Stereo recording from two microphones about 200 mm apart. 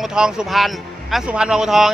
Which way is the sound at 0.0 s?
5° right (ahead or behind).